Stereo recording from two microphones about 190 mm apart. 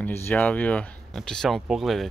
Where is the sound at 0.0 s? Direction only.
10° left (ahead or behind).